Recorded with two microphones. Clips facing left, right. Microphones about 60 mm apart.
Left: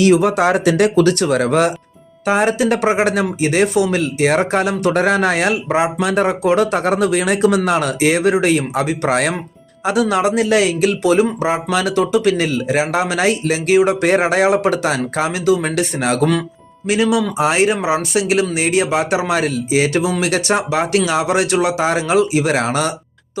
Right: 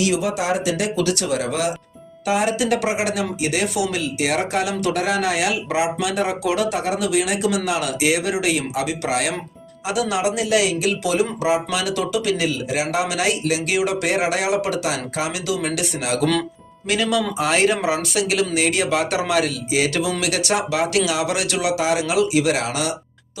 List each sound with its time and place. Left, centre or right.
0.0 s speech: left
16.8 s speech: centre; by 22.9 s left